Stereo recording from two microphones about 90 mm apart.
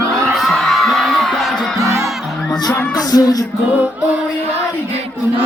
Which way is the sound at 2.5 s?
45° left (ahead or behind).